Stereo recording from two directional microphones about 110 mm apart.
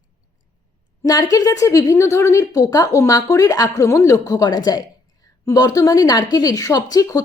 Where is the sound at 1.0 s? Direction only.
35° left (ahead or behind).